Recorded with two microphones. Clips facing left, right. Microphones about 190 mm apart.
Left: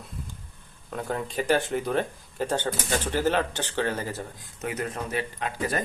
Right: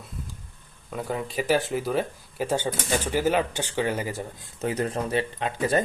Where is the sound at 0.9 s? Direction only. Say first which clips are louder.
Right 1 dB; 5° right (ahead or behind).